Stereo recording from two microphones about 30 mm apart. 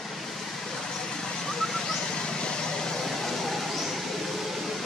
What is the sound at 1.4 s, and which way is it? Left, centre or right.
Vehicle, centre.